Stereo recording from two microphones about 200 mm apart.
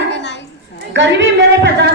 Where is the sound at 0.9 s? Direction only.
65° right (ahead or behind).